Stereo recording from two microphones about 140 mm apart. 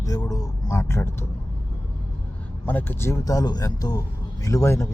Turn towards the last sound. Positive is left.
turn(degrees=20)  # may be behind; listen again after turning